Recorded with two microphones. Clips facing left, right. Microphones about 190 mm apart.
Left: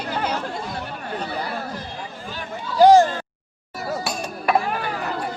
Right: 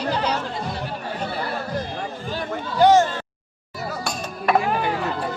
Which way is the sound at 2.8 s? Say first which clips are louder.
Left 3 dB; 35° left (ahead or behind).